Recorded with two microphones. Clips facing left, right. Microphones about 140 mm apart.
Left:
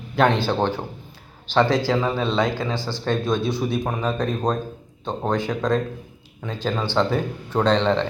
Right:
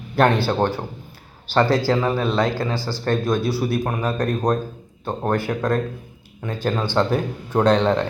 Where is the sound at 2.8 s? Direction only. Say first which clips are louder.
Right 1 dB; 20° left (ahead or behind).